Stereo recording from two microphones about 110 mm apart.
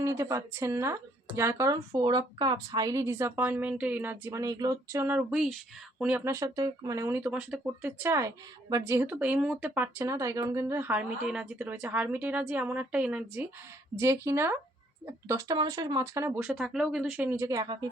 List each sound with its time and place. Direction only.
0.0 s speech: 25° right (ahead or behind)
6.0 s speech: 15° right (ahead or behind)
6.2 s speech: 30° right (ahead or behind)
10.0 s speech: 30° right (ahead or behind); by 13.5 s 15° right (ahead or behind)
13.9 s speech: 25° right (ahead or behind)
16.3 s speech: 5° right (ahead or behind)
17.5 s speech: 35° right (ahead or behind)